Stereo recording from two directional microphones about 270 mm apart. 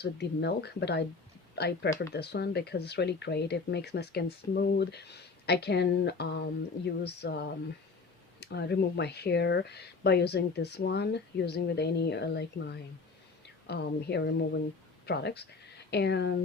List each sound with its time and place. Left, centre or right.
0.0 s speech: left